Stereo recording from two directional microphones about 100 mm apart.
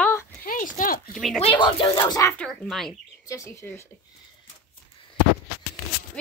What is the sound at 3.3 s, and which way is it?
Speech, 30° left (ahead or behind).